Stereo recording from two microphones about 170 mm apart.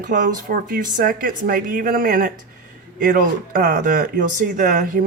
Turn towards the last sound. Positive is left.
turn(degrees=-50)  # may be behind; listen again after turning